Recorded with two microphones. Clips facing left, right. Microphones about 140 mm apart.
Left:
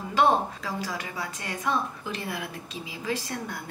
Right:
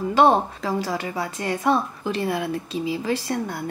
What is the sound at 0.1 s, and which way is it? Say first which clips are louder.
Speech: right 5 dB; 35° right (ahead or behind).